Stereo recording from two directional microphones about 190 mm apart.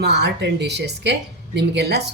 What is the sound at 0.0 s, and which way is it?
Speech, 60° right (ahead or behind).